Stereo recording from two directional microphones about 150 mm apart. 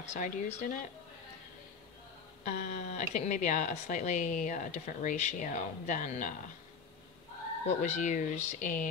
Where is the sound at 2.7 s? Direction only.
50° left (ahead or behind).